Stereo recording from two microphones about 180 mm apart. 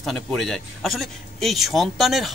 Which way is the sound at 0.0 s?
Centre (ahead or behind).